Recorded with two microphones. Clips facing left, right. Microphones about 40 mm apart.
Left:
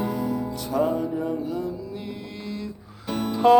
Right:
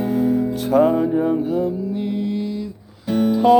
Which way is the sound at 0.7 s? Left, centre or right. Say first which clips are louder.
Right 8 dB; right.